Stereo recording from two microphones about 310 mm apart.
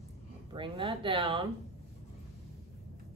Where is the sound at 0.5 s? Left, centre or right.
Centre.